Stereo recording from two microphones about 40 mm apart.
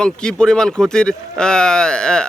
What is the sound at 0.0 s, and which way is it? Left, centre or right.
Speech, left.